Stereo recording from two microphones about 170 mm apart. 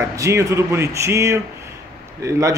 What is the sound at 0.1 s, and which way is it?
A man's voice, 20° right (ahead or behind).